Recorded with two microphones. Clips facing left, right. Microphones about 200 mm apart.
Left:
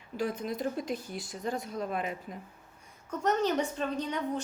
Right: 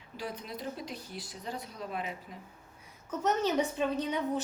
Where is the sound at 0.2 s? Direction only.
50° left (ahead or behind).